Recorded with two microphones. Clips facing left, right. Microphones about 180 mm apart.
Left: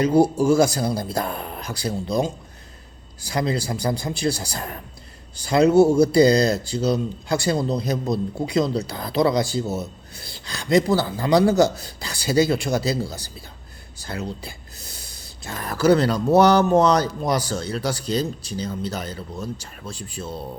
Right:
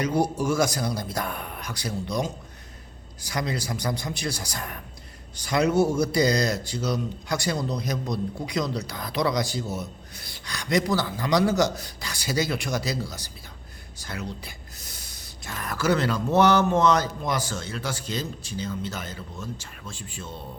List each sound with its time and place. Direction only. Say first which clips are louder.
0.0 s speech: left 7 dB; 30° left (ahead or behind)